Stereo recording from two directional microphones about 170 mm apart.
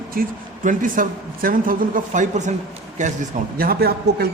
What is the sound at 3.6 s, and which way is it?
Speech, 65° right (ahead or behind).